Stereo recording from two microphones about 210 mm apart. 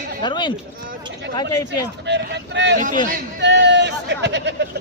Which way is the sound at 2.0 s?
55° right (ahead or behind).